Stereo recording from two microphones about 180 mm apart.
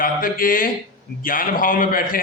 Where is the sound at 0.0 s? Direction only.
50° left (ahead or behind).